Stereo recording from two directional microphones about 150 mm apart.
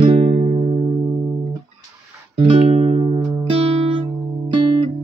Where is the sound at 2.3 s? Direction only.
40° right (ahead or behind).